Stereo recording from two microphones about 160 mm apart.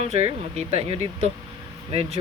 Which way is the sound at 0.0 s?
40° right (ahead or behind).